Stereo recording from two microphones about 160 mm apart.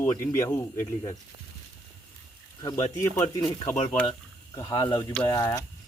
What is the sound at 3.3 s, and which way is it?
Speech, 25° left (ahead or behind).